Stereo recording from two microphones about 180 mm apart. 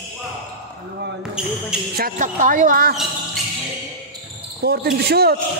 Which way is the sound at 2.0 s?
50° right (ahead or behind).